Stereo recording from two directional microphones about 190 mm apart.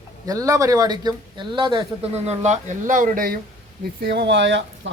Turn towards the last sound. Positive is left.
turn(degrees=-70)  # may be behind; listen again after turning